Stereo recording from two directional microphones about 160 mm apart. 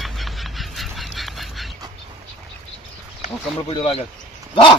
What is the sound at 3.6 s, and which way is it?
Speech, 35° left (ahead or behind).